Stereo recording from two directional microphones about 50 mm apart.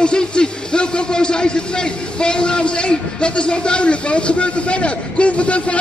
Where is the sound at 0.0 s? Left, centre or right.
Centre.